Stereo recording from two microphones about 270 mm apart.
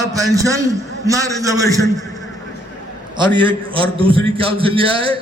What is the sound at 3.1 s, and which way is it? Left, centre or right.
A man's voice, centre.